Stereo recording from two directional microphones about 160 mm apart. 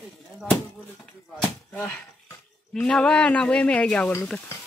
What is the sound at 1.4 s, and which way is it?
Speech, 10° left (ahead or behind).